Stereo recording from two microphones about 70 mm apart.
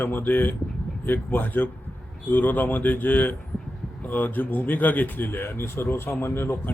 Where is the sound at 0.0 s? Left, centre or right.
Left.